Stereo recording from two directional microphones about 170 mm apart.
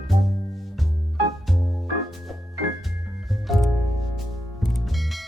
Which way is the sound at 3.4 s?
Centre (ahead or behind).